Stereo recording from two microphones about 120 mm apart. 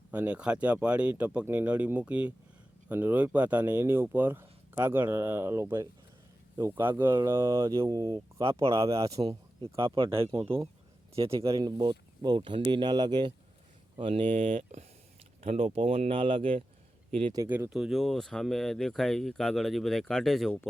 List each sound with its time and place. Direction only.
0.1 s speech: 10° right (ahead or behind); by 8.2 s 30° right (ahead or behind)
8.4 s speech: 50° right (ahead or behind)
9.2 s speech: 35° right (ahead or behind)
10.4 s speech: 20° right (ahead or behind)
11.1 s speech: 50° right (ahead or behind)
11.4 s speech: 30° right (ahead or behind)
14.0 s speech: 50° right (ahead or behind)
14.3 s speech: 90° right
15.4 s speech: 55° right (ahead or behind)
17.4 s speech: 20° right (ahead or behind)
17.7 s speech: 5° right (ahead or behind)